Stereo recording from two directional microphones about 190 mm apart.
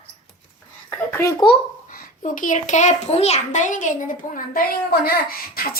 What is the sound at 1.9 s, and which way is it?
A woman's voice, 45° left (ahead or behind).